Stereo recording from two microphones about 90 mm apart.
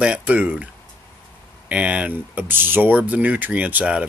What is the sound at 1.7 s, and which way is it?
Speech, 15° right (ahead or behind).